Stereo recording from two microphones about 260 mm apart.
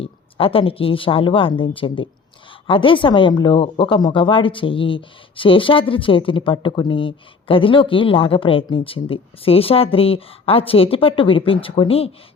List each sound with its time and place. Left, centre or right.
0.0 s speech: left